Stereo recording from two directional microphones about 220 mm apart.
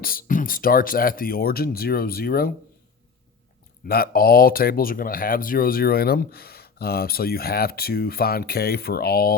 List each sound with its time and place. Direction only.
0.0 s speech: 40° left (ahead or behind)
3.8 s speech: 45° left (ahead or behind)